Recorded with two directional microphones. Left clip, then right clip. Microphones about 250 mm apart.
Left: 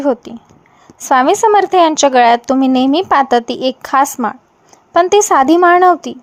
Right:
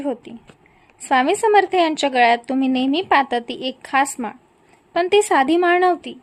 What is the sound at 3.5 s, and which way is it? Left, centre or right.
Speech, centre.